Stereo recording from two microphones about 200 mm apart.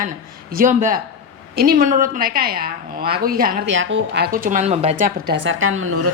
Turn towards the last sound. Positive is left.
turn(degrees=-90)